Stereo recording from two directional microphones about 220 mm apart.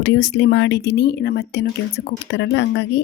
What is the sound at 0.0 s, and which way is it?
Speech, 55° left (ahead or behind).